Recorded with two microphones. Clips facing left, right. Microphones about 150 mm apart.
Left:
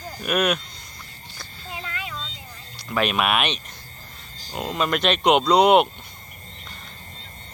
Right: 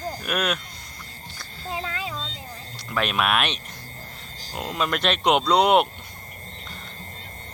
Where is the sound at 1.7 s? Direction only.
30° right (ahead or behind).